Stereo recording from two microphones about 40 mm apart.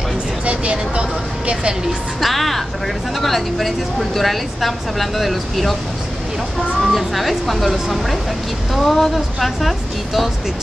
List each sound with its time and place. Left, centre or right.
0.5 s speech: right
2.1 s a woman's voice: centre
6.8 s a woman's voice: centre